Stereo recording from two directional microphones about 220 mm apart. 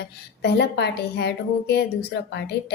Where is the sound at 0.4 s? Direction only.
50° left (ahead or behind).